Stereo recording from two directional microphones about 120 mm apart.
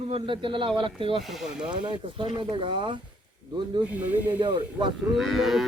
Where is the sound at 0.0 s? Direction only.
50° right (ahead or behind).